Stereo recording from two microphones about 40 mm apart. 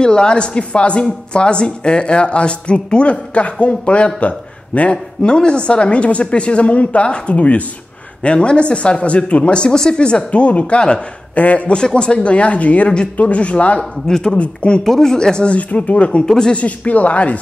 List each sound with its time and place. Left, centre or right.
0.0 s speech: centre
4.9 s speech: left
11.3 s speech: left
11.7 s speech: left
13.7 s speech: centre
14.3 s speech: left
14.8 s speech: centre
15.5 s speech: left
16.3 s speech: centre
16.5 s speech: left